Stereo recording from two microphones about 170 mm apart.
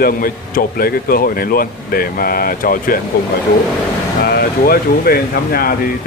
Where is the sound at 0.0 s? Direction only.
60° left (ahead or behind).